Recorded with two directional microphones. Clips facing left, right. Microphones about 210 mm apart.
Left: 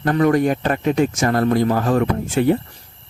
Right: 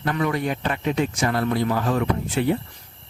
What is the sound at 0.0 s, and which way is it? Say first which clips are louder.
Speech: left 8 dB; 45° left (ahead or behind).